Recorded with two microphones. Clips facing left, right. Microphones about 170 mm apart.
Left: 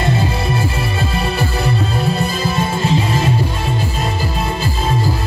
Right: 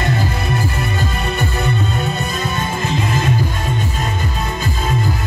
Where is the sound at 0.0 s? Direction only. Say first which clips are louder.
Left 2 dB; 30° left (ahead or behind).